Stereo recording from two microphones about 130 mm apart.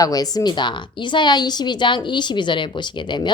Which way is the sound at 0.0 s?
30° left (ahead or behind).